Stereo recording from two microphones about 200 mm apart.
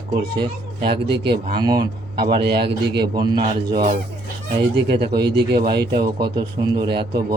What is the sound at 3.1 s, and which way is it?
Speech, 20° right (ahead or behind).